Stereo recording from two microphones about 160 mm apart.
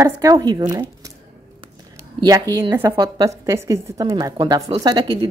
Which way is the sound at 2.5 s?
15° right (ahead or behind).